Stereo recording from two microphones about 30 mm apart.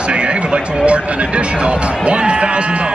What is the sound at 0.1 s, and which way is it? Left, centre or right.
Speech, right.